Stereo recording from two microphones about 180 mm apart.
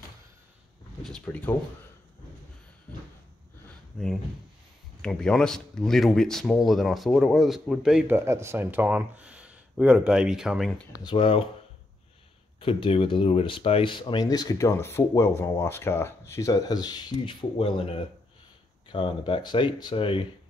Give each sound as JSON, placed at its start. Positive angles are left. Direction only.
{"t": 1.0, "sound": "speech", "side_deg": 5}
{"t": 3.9, "sound": "speech", "side_deg": 0}
{"t": 11.1, "sound": "speech", "side_deg": 30}
{"t": 12.5, "sound": "speech", "side_deg": 30}